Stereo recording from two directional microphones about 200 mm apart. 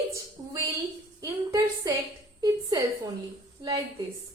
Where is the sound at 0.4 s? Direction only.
15° right (ahead or behind).